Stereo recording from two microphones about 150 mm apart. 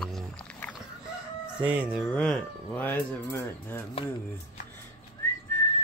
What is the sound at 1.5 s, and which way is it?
Chicken, 10° right (ahead or behind).